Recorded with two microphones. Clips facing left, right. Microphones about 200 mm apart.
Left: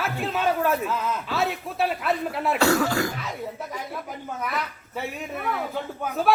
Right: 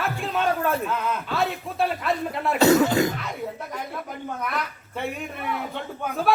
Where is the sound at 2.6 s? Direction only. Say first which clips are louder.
Right 5 dB; 20° right (ahead or behind).